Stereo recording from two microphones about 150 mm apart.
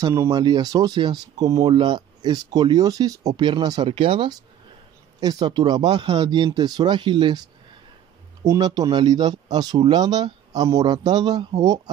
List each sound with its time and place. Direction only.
0.0 s speech: 20° right (ahead or behind)
8.5 s speech: 25° right (ahead or behind)